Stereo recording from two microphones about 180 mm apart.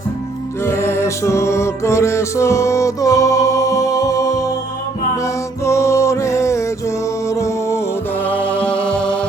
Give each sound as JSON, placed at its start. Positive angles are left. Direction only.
{"t": 0.6, "sound": "music", "side_deg": 15}